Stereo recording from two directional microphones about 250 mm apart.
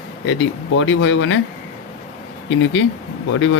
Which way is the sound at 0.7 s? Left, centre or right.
Left.